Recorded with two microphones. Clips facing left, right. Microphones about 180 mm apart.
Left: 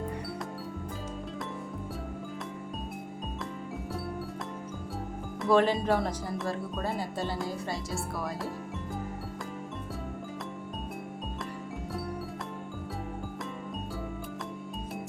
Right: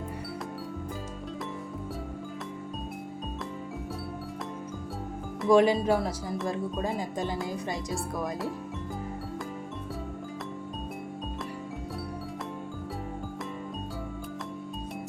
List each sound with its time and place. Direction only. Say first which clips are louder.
5.5 s speech: right 3 dB; 10° right (ahead or behind)
6.8 s speech: right 2 dB; 15° right (ahead or behind)